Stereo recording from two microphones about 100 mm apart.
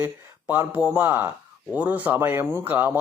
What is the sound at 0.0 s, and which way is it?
Speech, 15° right (ahead or behind).